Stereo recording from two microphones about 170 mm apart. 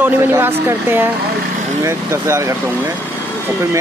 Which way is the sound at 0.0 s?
10° right (ahead or behind).